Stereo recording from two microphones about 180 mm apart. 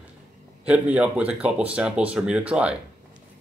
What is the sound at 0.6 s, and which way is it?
Speech, 5° right (ahead or behind).